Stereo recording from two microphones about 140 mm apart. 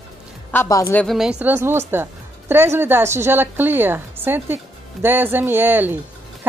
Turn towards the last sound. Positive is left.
turn(degrees=-15)  # may be behind; listen again after turning